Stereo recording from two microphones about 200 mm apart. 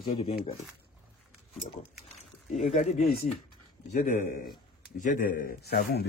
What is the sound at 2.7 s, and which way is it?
Speech, 35° left (ahead or behind).